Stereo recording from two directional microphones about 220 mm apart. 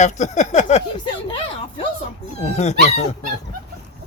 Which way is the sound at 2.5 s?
30° left (ahead or behind).